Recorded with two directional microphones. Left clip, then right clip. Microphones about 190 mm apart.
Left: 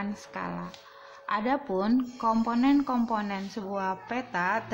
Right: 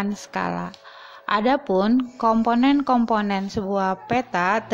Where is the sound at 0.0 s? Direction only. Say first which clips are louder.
Right 9 dB; 40° right (ahead or behind).